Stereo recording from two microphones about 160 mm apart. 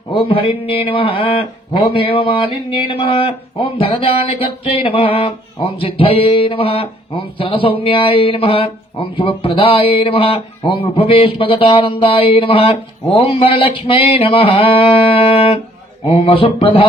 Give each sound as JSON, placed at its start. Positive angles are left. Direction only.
{"t": 0.1, "sound": "speech", "side_deg": 30}